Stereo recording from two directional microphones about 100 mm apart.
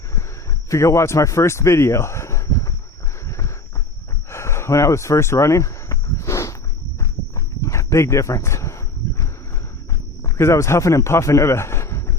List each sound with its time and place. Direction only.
0.7 s speech: 30° left (ahead or behind)
3.2 s a sound: 30° left (ahead or behind)
7.0 s dog: 30° left (ahead or behind)
10.2 s a man's voice: 25° left (ahead or behind)